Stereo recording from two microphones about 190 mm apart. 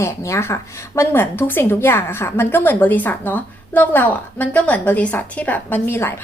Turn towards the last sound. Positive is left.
turn(degrees=10)  # may be behind; listen again after turning